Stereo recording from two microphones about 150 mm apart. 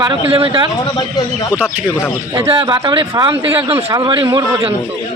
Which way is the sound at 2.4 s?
30° right (ahead or behind).